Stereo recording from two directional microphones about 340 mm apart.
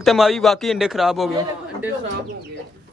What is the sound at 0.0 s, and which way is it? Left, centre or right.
Speech, centre.